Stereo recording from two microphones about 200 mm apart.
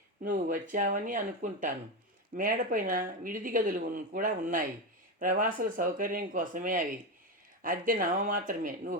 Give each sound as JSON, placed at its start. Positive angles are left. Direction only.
{"t": 0.2, "sound": "speech", "side_deg": -40}